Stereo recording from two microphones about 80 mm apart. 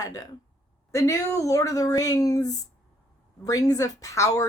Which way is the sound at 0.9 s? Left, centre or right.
Left.